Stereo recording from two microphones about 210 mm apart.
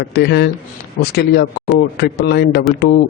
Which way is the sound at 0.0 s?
50° left (ahead or behind).